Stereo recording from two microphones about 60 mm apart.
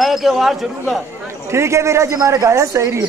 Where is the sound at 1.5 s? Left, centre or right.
Right.